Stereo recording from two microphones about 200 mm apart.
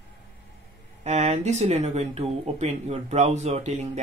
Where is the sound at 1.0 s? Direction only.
35° right (ahead or behind).